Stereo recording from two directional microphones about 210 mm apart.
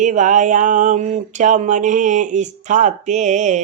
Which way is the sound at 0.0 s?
35° right (ahead or behind).